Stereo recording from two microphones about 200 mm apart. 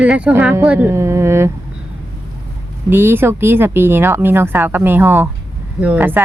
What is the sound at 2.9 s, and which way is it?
Speech, 10° right (ahead or behind).